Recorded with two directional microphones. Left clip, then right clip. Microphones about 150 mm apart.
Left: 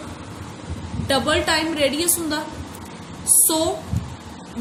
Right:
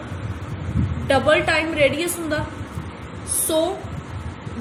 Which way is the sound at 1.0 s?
75° left (ahead or behind).